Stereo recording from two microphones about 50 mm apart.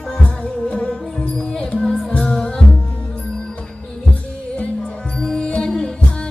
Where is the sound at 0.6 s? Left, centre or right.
Centre.